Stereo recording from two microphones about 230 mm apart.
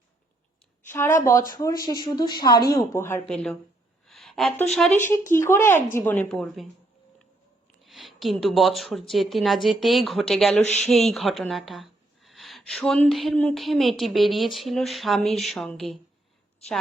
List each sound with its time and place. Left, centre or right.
0.9 s speech: centre
4.0 s a sound: centre
4.7 s speech: centre
7.8 s speech: centre